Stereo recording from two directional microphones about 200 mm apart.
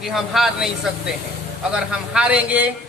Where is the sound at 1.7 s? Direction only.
5° right (ahead or behind).